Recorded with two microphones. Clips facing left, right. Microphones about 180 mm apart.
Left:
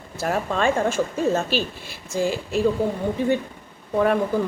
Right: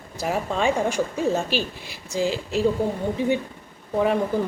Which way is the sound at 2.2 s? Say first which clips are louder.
Left 1 dB; 15° left (ahead or behind).